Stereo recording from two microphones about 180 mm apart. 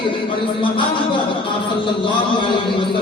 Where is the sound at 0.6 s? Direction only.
25° left (ahead or behind).